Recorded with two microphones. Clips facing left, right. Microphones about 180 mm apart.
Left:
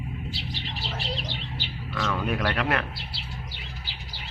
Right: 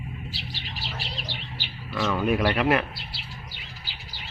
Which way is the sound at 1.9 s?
5° right (ahead or behind).